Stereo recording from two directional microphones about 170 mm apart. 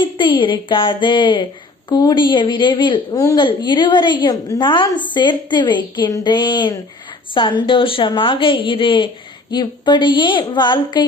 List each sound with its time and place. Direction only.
0.0 s a woman's voice: 30° left (ahead or behind)